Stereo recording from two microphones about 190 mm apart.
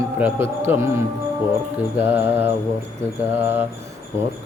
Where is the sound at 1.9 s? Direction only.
10° right (ahead or behind).